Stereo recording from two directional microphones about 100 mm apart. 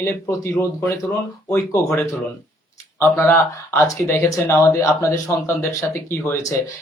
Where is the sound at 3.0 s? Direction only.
25° left (ahead or behind).